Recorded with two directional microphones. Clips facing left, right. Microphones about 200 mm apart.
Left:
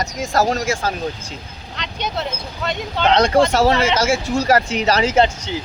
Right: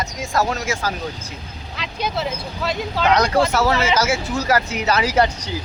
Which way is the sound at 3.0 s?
30° left (ahead or behind).